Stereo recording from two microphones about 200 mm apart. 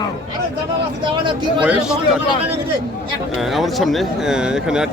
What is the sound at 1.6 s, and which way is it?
Speech, 5° right (ahead or behind).